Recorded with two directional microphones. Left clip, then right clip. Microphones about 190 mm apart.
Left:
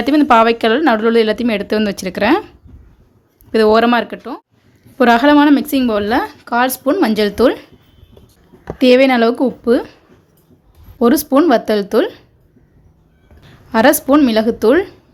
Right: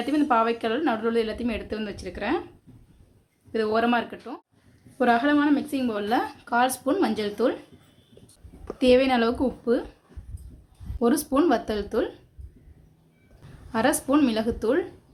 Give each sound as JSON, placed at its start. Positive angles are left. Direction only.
{"t": 0.0, "sound": "speech", "side_deg": 45}
{"t": 3.5, "sound": "speech", "side_deg": 50}
{"t": 8.8, "sound": "speech", "side_deg": 35}
{"t": 11.0, "sound": "speech", "side_deg": 35}
{"t": 13.7, "sound": "speech", "side_deg": 40}